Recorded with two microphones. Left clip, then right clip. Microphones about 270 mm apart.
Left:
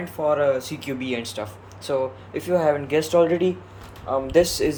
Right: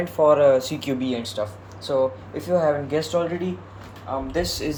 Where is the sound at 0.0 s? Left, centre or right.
Centre.